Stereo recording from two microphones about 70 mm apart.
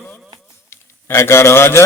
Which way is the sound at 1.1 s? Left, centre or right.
Left.